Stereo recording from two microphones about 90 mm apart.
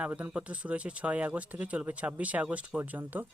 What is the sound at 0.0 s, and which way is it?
Speech, 15° right (ahead or behind).